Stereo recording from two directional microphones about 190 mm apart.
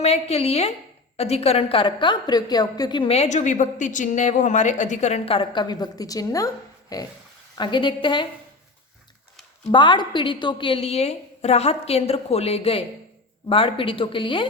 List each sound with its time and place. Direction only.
0.0 s a woman's voice: 35° left (ahead or behind)
9.7 s a woman's voice: 25° left (ahead or behind)